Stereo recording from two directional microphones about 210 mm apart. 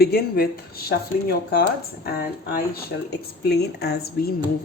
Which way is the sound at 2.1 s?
45° left (ahead or behind).